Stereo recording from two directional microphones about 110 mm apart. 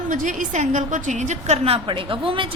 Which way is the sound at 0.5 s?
90° right.